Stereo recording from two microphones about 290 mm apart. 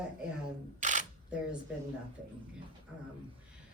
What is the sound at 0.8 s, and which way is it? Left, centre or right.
Camera, right.